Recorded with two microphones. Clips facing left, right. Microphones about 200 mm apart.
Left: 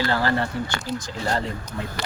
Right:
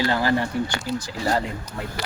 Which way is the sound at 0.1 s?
15° right (ahead or behind).